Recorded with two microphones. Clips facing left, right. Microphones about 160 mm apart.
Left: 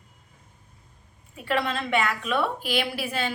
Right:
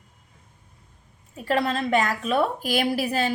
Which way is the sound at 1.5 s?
40° right (ahead or behind).